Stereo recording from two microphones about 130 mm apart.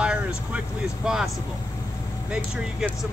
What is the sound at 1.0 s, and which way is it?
Speech, 5° right (ahead or behind).